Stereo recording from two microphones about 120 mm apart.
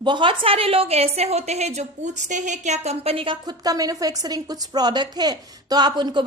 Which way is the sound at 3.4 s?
30° right (ahead or behind).